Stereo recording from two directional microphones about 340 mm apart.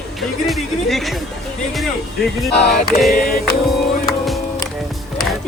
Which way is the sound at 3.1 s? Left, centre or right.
Left.